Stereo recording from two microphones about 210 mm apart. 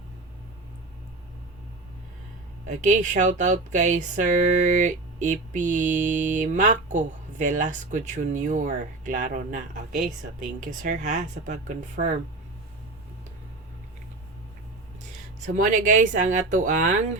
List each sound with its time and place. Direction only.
2.6 s speech: 35° right (ahead or behind)
15.7 s speech: 35° right (ahead or behind)